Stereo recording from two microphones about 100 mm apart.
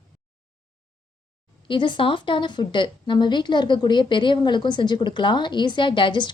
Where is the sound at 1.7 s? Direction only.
55° left (ahead or behind).